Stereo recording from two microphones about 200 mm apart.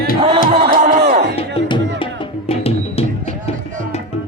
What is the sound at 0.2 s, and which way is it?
Music, 30° right (ahead or behind).